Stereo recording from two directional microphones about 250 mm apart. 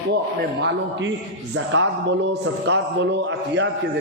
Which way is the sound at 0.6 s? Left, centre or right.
Right.